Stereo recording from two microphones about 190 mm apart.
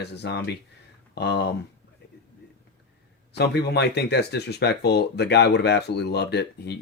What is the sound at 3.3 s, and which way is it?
Speech, 60° left (ahead or behind).